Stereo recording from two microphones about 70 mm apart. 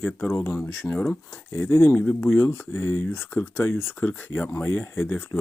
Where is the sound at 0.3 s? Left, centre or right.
Left.